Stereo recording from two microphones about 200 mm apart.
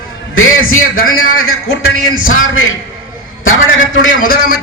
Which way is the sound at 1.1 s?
90° left.